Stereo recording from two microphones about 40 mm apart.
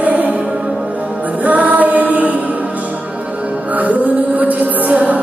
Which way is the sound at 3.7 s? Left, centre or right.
Right.